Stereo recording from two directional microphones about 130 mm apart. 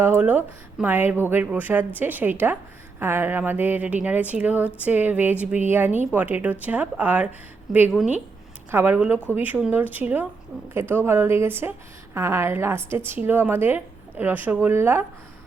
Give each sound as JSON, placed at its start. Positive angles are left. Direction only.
{"t": 0.0, "sound": "speech", "side_deg": -15}